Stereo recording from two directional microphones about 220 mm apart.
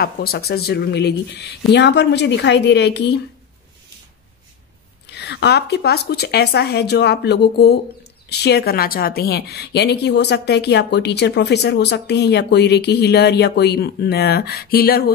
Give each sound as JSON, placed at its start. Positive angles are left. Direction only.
{"t": 0.0, "sound": "a woman's voice", "side_deg": 45}
{"t": 5.1, "sound": "a woman's voice", "side_deg": 50}